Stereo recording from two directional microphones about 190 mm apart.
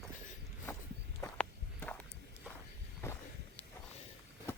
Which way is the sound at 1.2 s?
10° left (ahead or behind).